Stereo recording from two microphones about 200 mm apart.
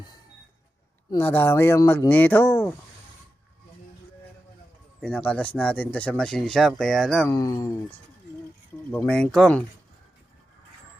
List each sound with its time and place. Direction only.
1.1 s speech: 10° left (ahead or behind)
4.9 s speech: 5° left (ahead or behind)
7.3 s speech: 15° left (ahead or behind)